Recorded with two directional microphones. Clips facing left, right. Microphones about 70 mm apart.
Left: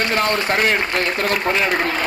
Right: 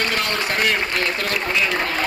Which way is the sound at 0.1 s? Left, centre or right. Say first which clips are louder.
Left 4 dB; left.